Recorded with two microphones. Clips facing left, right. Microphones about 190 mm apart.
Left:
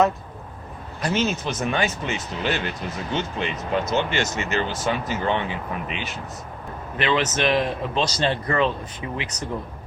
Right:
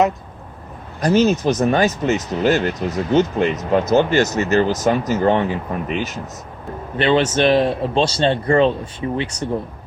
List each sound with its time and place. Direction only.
1.0 s speech: 40° right (ahead or behind)
6.9 s speech: 30° right (ahead or behind)